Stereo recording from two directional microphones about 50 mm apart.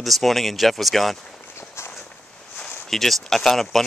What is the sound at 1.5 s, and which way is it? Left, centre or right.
Walk, left.